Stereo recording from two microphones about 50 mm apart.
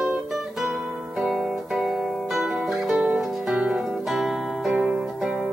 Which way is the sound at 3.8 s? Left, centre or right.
Centre.